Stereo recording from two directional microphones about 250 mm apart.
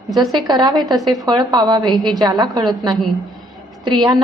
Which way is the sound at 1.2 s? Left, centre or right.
Centre.